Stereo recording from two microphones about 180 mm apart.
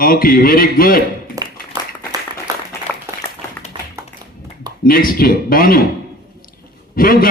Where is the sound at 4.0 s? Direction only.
15° right (ahead or behind).